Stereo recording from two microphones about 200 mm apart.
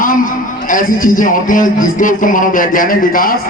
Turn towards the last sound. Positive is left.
turn(degrees=45)  # may be behind; listen again after turning